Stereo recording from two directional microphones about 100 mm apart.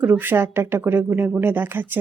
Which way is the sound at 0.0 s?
15° right (ahead or behind).